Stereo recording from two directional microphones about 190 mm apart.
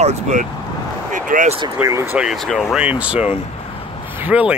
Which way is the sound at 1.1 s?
40° right (ahead or behind).